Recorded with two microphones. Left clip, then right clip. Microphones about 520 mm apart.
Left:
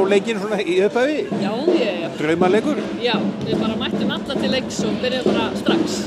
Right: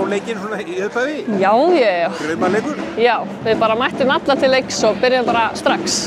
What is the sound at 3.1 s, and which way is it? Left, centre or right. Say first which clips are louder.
Speech: right 4 dB; right.